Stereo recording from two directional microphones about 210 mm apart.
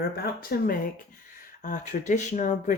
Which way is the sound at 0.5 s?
45° left (ahead or behind).